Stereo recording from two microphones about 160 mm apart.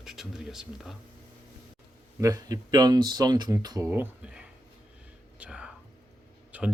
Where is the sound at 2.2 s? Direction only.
20° right (ahead or behind).